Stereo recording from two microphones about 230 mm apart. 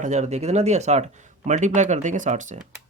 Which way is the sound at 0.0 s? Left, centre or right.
Right.